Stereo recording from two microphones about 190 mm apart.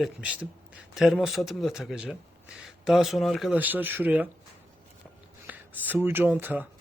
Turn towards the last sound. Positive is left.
turn(degrees=-10)  # may be behind; listen again after turning